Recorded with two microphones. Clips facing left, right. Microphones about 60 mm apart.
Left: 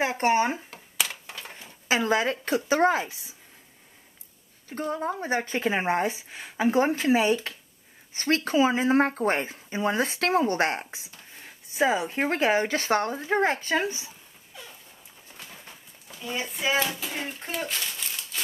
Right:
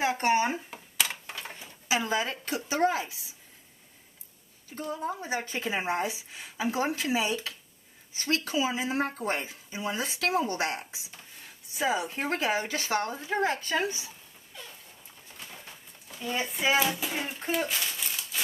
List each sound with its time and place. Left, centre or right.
0.0 s speech: left
1.0 s a sound: centre
1.9 s a woman's voice: left
4.6 s speech: left
16.2 s speech: centre